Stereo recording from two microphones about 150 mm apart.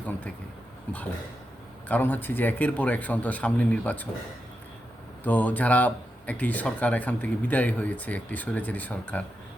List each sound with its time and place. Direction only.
0.9 s speech: 10° left (ahead or behind)
5.2 s speech: 10° left (ahead or behind)